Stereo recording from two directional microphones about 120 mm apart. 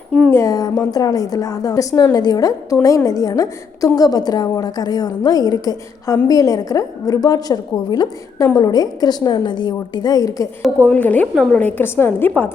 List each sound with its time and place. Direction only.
0.3 s a woman's voice: 25° left (ahead or behind)
10.8 s a woman's voice: 10° left (ahead or behind)